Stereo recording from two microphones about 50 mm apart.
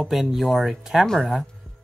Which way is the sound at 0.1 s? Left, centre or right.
Centre.